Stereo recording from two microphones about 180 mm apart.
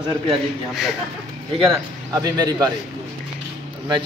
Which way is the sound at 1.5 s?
25° right (ahead or behind).